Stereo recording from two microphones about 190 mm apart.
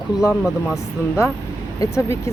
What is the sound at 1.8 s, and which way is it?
Speech, 15° left (ahead or behind).